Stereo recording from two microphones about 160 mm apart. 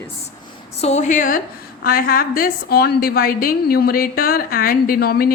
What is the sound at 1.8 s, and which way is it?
A woman's voice, 65° left (ahead or behind).